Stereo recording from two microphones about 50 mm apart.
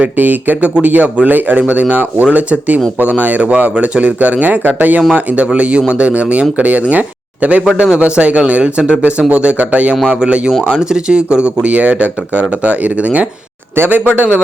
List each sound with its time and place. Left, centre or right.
0.0 s speech: right
7.6 s speech: centre
13.7 s speech: right